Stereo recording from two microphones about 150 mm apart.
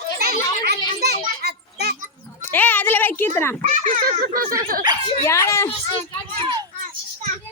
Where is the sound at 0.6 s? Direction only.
90° right.